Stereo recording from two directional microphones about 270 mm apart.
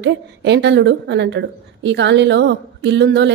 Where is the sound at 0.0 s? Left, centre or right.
Right.